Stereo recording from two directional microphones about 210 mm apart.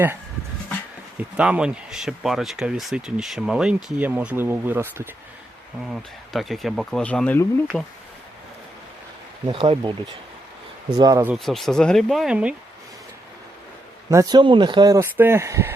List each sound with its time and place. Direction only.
1.4 s speech: 5° right (ahead or behind)
5.9 s speech: centre (ahead or behind)
9.5 s speech: 25° right (ahead or behind)
10.9 s speech: 15° right (ahead or behind)
11.3 s speech: centre (ahead or behind)
14.1 s speech: 15° right (ahead or behind)